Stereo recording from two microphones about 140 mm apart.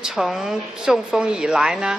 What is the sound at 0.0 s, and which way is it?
Speech, 5° right (ahead or behind).